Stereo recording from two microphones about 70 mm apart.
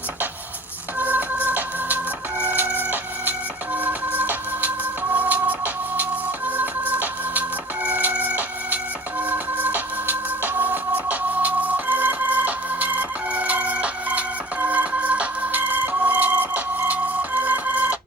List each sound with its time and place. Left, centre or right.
0.9 s music: right
2.4 s a sound: right
6.5 s music: right
7.9 s printer: right